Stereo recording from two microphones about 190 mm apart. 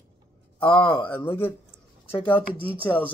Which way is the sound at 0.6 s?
25° left (ahead or behind).